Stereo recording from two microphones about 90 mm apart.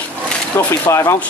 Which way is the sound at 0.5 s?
30° left (ahead or behind).